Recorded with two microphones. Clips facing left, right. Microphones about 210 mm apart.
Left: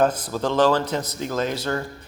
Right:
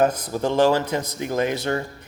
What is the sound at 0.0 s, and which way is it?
Speech, 15° right (ahead or behind).